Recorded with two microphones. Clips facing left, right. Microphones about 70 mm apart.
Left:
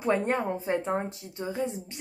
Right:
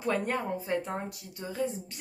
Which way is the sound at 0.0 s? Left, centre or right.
Left.